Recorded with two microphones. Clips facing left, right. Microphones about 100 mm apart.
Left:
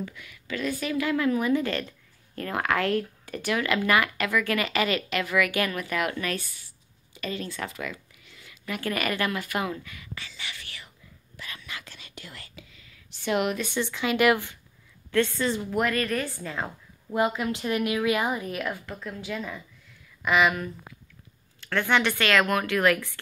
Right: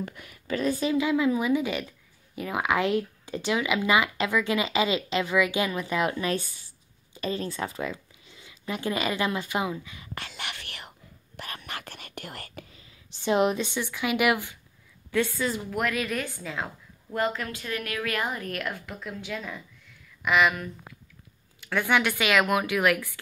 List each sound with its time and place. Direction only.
0.0 s speech: 45° right (ahead or behind)
0.9 s speech: 15° right (ahead or behind)
10.1 s whispering: 60° right (ahead or behind)
12.7 s a sound: 30° right (ahead or behind)
13.7 s a woman's voice: 10° right (ahead or behind)
21.5 s speech: 10° right (ahead or behind)